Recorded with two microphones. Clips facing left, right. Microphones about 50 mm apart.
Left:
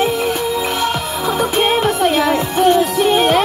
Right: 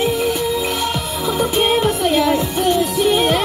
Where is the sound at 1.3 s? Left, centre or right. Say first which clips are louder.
Even; left.